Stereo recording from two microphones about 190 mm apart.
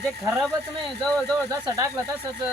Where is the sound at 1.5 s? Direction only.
20° right (ahead or behind).